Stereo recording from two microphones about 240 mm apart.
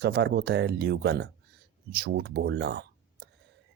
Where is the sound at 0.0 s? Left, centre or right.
Right.